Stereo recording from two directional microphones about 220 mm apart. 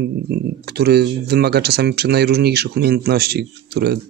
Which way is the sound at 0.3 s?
45° right (ahead or behind).